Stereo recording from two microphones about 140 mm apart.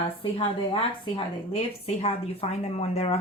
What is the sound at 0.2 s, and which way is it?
A woman's voice, 40° left (ahead or behind).